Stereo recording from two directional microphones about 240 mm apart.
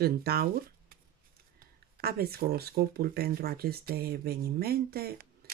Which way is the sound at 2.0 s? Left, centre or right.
Right.